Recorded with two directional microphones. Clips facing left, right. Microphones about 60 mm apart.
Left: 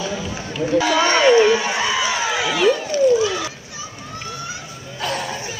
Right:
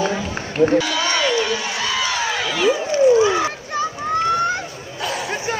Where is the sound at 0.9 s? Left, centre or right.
Left.